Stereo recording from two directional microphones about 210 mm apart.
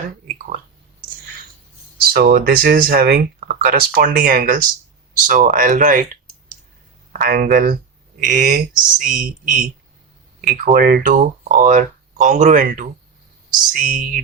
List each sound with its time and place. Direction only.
2.0 s speech: 45° right (ahead or behind)
7.1 s speech: 45° right (ahead or behind)